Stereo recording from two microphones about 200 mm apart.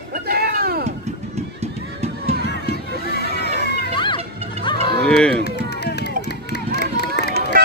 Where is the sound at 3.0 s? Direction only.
55° left (ahead or behind).